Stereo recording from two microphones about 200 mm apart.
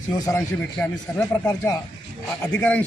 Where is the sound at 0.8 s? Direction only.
10° left (ahead or behind).